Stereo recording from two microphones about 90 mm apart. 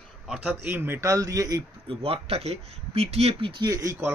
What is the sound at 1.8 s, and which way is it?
Speech, 90° right.